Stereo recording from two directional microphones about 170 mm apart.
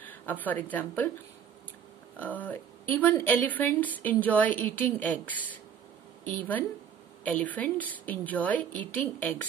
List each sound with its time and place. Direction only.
0.0 s speech: 10° left (ahead or behind)
2.1 s a woman's voice: 10° left (ahead or behind)